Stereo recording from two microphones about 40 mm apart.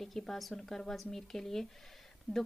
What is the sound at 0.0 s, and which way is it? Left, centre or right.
A woman's voice, centre.